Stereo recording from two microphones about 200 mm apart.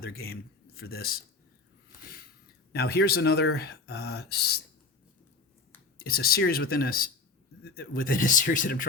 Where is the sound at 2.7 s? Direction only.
50° left (ahead or behind).